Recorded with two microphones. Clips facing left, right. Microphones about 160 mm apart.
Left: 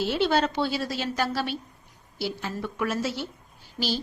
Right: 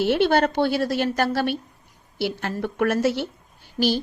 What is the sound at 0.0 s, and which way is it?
A woman's voice, 60° right (ahead or behind).